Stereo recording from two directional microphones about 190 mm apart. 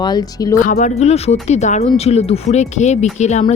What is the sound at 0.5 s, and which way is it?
Speech, 45° left (ahead or behind).